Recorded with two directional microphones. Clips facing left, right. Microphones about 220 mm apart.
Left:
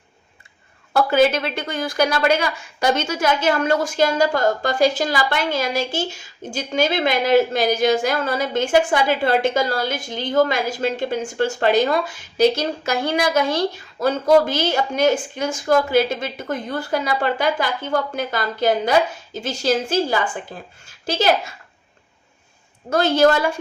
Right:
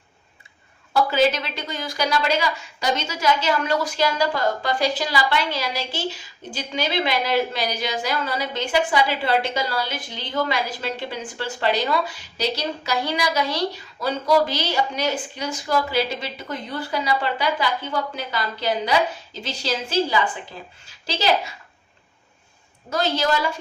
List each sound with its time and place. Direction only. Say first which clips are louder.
0.9 s a woman's voice: left 3 dB; 50° left (ahead or behind)
22.9 s a woman's voice: left 7 dB; 50° left (ahead or behind)